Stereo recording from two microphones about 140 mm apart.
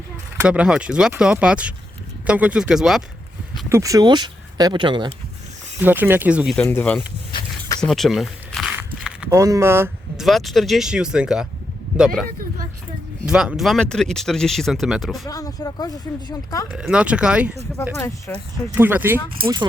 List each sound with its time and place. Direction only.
0.4 s speech: 10° right (ahead or behind)
3.7 s speech: 20° right (ahead or behind)
5.8 s speech: 15° right (ahead or behind)
6.6 s speech: 15° left (ahead or behind)
7.8 s speech: centre (ahead or behind)
8.7 s walk: 15° right (ahead or behind)
9.3 s speech: 25° right (ahead or behind)
10.2 s speech: centre (ahead or behind)
13.2 s speech: 5° right (ahead or behind)
15.3 s speech: 25° left (ahead or behind)
16.7 s speech: 5° right (ahead or behind)
17.9 s speech: 15° left (ahead or behind)
18.7 s speech: 15° right (ahead or behind)